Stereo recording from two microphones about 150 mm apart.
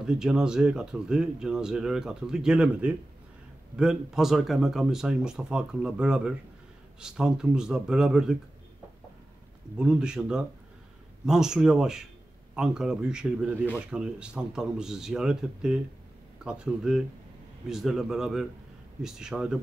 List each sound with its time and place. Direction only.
0.0 s speech: 5° right (ahead or behind)
9.8 s speech: 5° right (ahead or behind)